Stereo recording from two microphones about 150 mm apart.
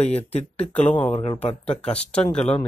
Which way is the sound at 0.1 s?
45° left (ahead or behind).